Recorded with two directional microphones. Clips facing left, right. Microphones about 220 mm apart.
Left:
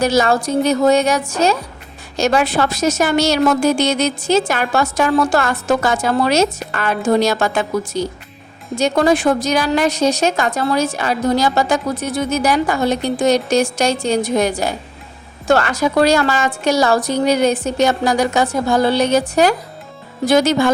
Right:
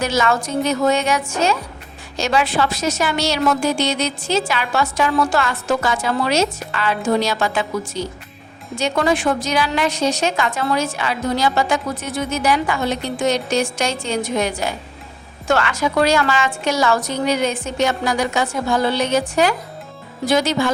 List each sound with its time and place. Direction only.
0.0 s a woman's voice: 35° left (ahead or behind)